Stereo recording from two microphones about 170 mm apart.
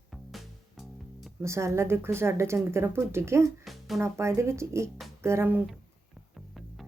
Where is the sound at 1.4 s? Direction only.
15° right (ahead or behind).